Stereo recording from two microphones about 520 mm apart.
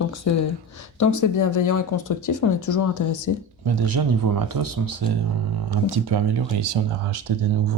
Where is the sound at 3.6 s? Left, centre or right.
Right.